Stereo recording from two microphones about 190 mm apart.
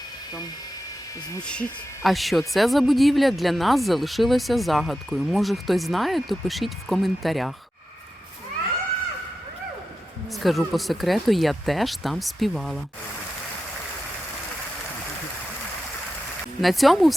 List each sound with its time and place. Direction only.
1.5 s speech: 5° left (ahead or behind)
10.3 s speech: centre (ahead or behind)
16.6 s speech: centre (ahead or behind)